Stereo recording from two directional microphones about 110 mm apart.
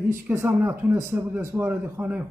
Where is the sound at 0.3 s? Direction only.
25° right (ahead or behind).